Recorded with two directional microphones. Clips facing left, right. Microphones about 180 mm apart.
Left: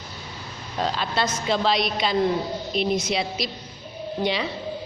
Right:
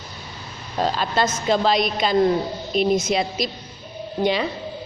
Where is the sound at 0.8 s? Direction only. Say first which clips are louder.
Right 4 dB; 45° right (ahead or behind).